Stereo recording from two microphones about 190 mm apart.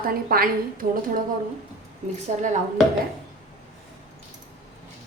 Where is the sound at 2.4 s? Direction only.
40° right (ahead or behind).